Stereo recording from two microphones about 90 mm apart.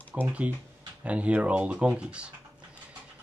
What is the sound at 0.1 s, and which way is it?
Speech, 15° right (ahead or behind).